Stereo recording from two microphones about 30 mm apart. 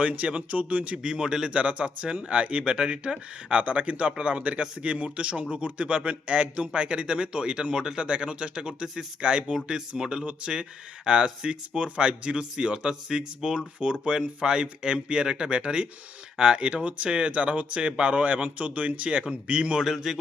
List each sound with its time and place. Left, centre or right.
0.0 s speech: right
1.0 s speech: right
1.5 s a man's voice: right
2.7 s a man's voice: right
3.6 s a man's voice: right
10.0 s a man's voice: right
17.8 s speech: right
19.8 s a sound: centre